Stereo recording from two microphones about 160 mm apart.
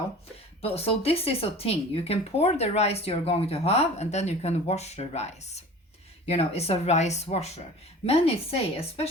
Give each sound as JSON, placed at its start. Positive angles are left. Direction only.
{"t": 0.6, "sound": "speech", "side_deg": 40}